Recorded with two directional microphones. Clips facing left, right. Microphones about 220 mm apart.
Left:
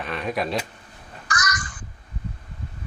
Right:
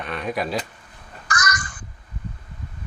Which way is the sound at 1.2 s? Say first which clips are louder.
Right 2 dB; 50° right (ahead or behind).